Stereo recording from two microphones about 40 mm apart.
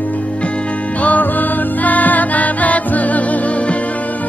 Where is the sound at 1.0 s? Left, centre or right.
Left.